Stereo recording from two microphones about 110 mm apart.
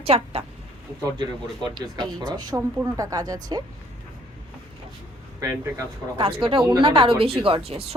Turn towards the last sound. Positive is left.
turn(degrees=-65)  # may be behind; listen again after turning